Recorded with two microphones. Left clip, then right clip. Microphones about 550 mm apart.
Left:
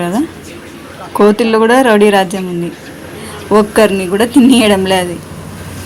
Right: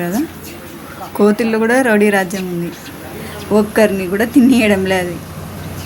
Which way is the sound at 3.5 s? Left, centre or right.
Right.